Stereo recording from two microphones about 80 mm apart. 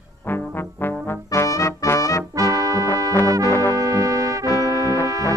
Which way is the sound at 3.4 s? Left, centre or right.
Left.